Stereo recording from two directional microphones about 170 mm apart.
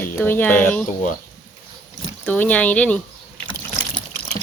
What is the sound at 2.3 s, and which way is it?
Speech, 10° left (ahead or behind).